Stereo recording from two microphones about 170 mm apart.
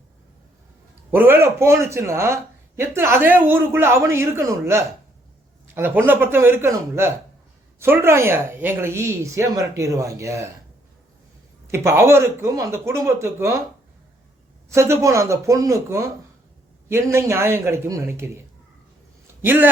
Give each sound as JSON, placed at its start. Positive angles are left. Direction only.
{"t": 1.1, "sound": "speech", "side_deg": -10}
{"t": 11.7, "sound": "speech", "side_deg": -15}
{"t": 14.7, "sound": "speech", "side_deg": -15}
{"t": 19.4, "sound": "speech", "side_deg": -10}